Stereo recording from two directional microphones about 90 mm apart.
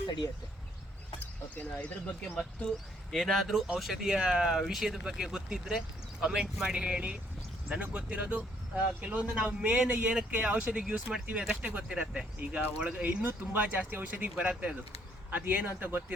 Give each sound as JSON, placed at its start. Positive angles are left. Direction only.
{"t": 1.2, "sound": "speech", "side_deg": 20}
{"t": 3.1, "sound": "speech", "side_deg": 5}